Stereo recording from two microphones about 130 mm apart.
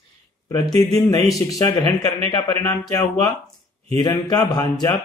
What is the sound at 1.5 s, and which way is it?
Speech, 25° left (ahead or behind).